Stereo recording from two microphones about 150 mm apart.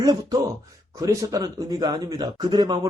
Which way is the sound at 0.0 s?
25° right (ahead or behind).